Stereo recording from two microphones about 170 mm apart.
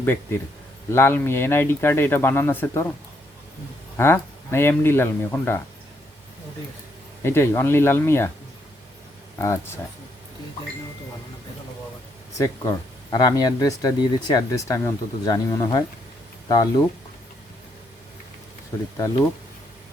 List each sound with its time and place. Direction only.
0.0 s speech: 15° left (ahead or behind)
3.9 s speech: 15° left (ahead or behind)
7.3 s speech: 15° left (ahead or behind)
9.4 s speech: 15° left (ahead or behind)
12.4 s speech: 20° left (ahead or behind)